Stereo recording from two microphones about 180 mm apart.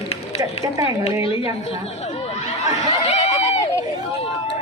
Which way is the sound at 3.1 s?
35° left (ahead or behind).